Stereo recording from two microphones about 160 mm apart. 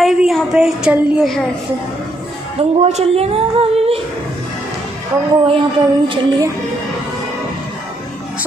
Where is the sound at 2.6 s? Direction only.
40° right (ahead or behind).